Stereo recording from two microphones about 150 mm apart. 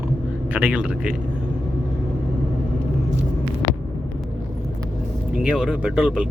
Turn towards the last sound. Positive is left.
turn(degrees=-10)  # may be behind; listen again after turning